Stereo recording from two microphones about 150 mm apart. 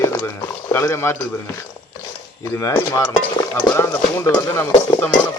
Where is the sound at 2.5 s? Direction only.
20° left (ahead or behind).